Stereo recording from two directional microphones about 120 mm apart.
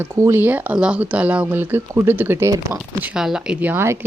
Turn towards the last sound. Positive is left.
turn(degrees=-20)  # may be behind; listen again after turning